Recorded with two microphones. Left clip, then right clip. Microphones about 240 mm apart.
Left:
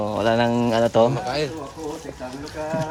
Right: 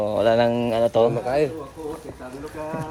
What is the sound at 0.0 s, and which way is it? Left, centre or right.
Speech, centre.